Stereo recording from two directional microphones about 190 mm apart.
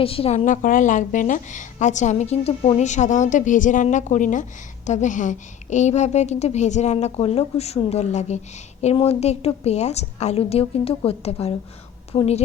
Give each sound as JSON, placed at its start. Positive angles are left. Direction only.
{"t": 0.0, "sound": "a woman's voice", "side_deg": 30}